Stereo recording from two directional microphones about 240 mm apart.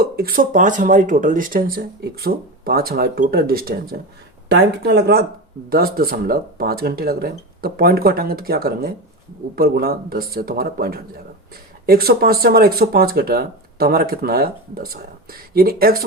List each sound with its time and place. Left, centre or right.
0.0 s speech: right